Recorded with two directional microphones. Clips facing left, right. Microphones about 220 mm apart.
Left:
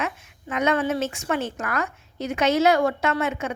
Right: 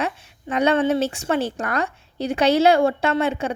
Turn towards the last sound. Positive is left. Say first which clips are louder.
# right 3 dB
turn(degrees=-30)  # may be behind; listen again after turning